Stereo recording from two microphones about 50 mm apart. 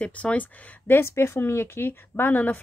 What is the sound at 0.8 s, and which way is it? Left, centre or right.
Speech, left.